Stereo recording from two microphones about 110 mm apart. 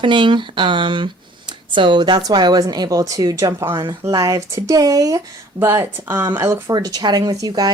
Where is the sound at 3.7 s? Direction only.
40° right (ahead or behind).